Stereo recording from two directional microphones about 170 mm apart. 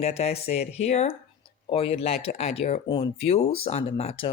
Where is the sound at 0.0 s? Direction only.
35° left (ahead or behind).